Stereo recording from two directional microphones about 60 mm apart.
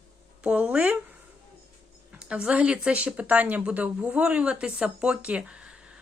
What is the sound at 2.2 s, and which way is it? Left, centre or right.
Speech, centre.